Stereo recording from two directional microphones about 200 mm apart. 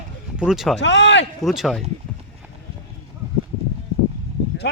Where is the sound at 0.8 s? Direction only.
65° left (ahead or behind).